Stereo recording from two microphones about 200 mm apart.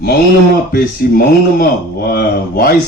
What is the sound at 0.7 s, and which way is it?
Speech, 50° left (ahead or behind).